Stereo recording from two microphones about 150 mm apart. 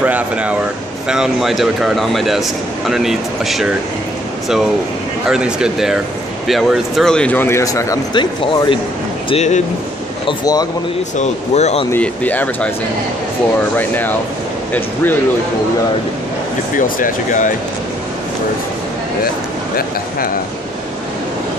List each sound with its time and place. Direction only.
0.0 s speech: 10° right (ahead or behind)
5.2 s speech: 5° right (ahead or behind); by 8.7 s 30° left (ahead or behind)
9.3 s speech: 50° left (ahead or behind)
10.2 s speech: 25° left (ahead or behind)
11.1 s speech: 45° left (ahead or behind)
11.9 s speech: 10° left (ahead or behind)
13.7 s speech: 10° left (ahead or behind)
16.7 s speech: 65° left (ahead or behind)